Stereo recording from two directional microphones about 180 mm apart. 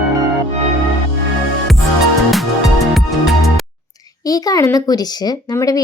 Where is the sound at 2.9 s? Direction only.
Centre (ahead or behind).